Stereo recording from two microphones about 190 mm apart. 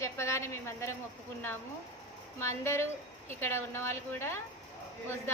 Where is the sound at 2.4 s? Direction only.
15° left (ahead or behind).